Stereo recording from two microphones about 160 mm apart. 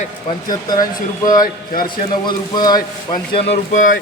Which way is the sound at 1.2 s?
25° left (ahead or behind).